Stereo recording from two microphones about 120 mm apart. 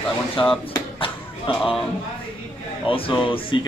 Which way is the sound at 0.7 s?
45° left (ahead or behind).